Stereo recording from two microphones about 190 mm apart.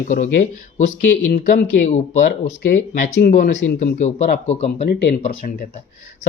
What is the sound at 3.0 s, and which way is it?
Speech, 45° left (ahead or behind).